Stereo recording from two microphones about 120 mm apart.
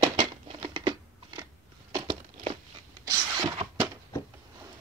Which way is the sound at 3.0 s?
35° right (ahead or behind).